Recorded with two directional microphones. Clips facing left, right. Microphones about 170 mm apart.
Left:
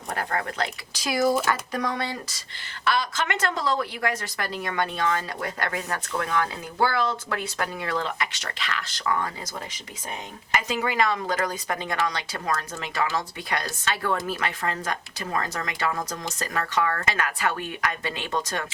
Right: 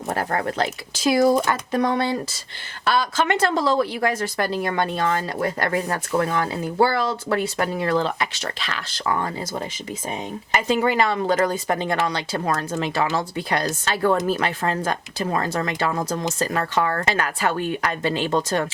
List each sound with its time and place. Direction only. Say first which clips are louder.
0.9 s speech: right 6 dB; 25° right (ahead or behind)